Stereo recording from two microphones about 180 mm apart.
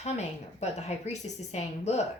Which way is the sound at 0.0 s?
40° left (ahead or behind).